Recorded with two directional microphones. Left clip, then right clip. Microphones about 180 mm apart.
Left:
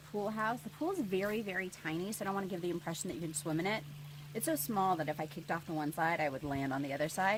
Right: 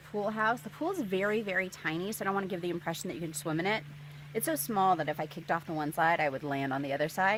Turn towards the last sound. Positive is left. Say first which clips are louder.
# right 4 dB
turn(degrees=-25)  # may be behind; listen again after turning